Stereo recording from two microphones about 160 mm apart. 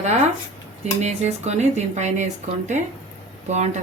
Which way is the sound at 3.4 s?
45° right (ahead or behind).